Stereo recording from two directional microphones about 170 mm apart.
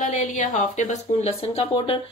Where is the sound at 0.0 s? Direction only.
50° left (ahead or behind).